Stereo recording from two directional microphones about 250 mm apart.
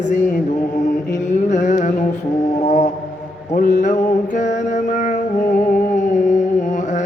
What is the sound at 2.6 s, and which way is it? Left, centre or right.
Music, left.